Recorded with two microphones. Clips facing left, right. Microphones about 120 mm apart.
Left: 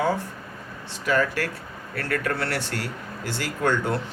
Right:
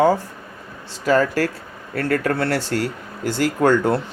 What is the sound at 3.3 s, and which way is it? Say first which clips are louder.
Speech: right 8 dB; 45° right (ahead or behind).